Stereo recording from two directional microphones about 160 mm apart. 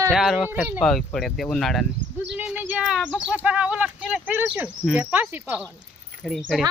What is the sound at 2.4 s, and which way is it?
Speech, 10° right (ahead or behind).